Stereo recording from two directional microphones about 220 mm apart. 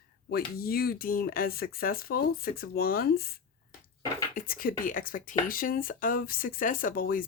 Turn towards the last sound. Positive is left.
turn(degrees=40)  # may be behind; listen again after turning